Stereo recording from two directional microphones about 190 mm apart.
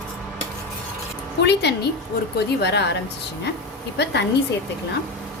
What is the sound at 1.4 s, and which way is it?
A woman's voice, 60° left (ahead or behind).